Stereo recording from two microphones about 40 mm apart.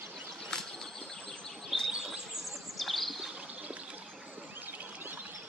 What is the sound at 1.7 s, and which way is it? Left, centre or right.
Chirp, centre.